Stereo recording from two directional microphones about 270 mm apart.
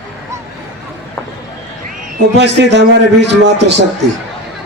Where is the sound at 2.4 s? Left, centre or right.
Right.